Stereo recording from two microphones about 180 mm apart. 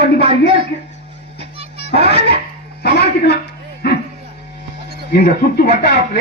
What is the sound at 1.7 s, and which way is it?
Speech, 70° left (ahead or behind).